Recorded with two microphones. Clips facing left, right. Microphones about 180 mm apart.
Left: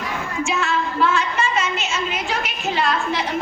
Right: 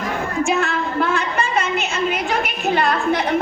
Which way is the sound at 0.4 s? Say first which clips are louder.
Right 1 dB; 60° right (ahead or behind).